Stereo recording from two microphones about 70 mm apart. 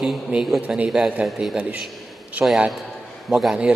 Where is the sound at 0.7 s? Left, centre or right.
Centre.